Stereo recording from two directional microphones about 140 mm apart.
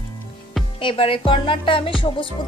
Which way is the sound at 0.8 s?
40° left (ahead or behind).